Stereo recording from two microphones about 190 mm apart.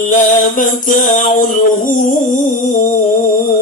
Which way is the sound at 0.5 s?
45° left (ahead or behind).